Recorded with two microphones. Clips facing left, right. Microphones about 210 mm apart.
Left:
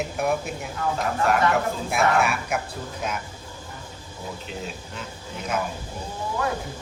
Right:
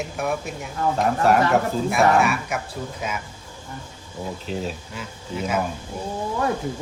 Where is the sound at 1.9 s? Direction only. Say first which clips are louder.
Right 3 dB; centre (ahead or behind).